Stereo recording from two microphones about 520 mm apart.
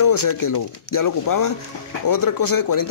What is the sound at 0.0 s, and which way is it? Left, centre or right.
Speech, left.